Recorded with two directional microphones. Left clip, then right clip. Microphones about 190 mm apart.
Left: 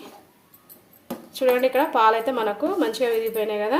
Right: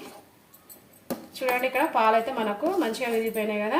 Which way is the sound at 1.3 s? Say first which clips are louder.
Left 6 dB; 50° left (ahead or behind).